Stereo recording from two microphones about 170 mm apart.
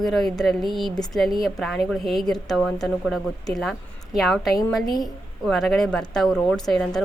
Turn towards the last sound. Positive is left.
turn(degrees=0)  # may be behind; listen again after turning